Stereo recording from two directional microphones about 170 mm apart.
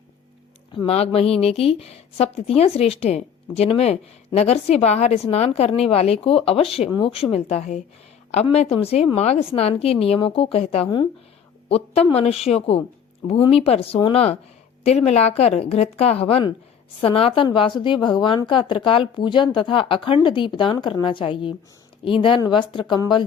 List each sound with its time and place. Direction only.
0.9 s a woman's voice: 35° left (ahead or behind)